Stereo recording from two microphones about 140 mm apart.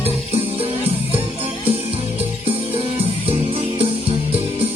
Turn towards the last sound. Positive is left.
turn(degrees=-45)  # may be behind; listen again after turning